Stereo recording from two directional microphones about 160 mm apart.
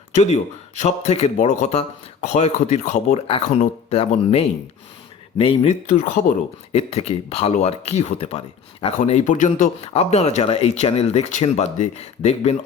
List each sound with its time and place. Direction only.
0.1 s speech: 45° left (ahead or behind)
5.9 s speech: 50° left (ahead or behind)